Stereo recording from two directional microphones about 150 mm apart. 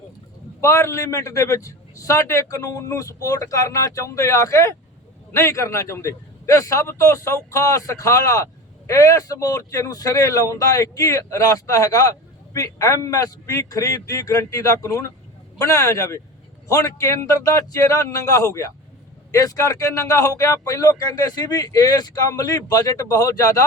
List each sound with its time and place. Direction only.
0.6 s speech: 20° left (ahead or behind)